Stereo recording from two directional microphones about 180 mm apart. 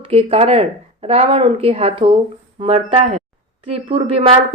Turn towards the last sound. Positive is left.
turn(degrees=-30)  # may be behind; listen again after turning